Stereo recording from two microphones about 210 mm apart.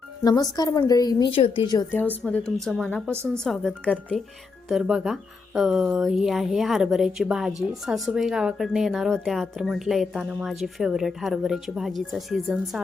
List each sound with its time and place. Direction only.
0.2 s a woman's voice: 20° left (ahead or behind)
1.9 s a woman's voice: 10° left (ahead or behind)
3.1 s speech: 10° right (ahead or behind)
3.4 s a woman's voice: centre (ahead or behind)